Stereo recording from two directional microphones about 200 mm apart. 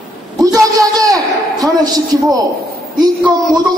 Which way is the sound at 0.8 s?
15° right (ahead or behind).